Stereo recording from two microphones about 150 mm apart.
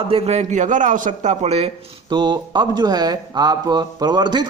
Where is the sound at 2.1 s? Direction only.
30° right (ahead or behind).